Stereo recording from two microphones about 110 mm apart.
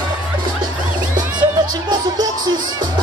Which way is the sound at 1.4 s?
40° right (ahead or behind).